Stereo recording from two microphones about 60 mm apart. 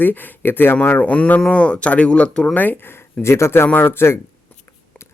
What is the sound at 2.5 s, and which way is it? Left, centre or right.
Speech, left.